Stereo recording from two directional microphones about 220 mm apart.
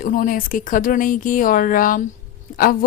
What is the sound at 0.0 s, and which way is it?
A woman's voice, 40° left (ahead or behind).